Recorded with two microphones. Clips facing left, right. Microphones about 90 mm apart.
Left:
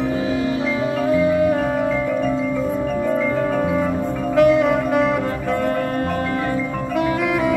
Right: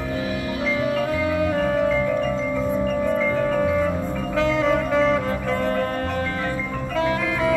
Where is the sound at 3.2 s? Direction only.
15° left (ahead or behind).